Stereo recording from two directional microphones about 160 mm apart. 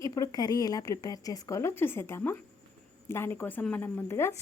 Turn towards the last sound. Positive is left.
turn(degrees=15)  # may be behind; listen again after turning